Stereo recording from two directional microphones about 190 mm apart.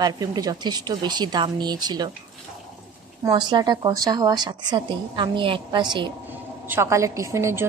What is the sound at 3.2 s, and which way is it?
A woman's voice, 20° right (ahead or behind).